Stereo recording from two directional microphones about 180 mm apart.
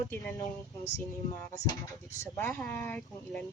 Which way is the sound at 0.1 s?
15° left (ahead or behind).